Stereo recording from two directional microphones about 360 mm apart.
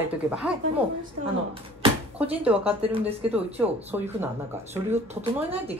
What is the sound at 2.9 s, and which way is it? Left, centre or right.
A woman's voice, centre.